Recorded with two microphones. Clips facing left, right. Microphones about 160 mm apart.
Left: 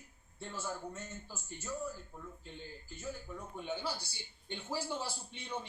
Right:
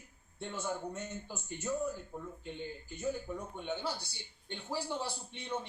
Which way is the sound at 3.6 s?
Centre (ahead or behind).